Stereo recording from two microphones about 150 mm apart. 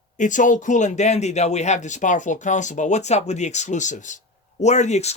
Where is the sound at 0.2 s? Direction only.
60° left (ahead or behind).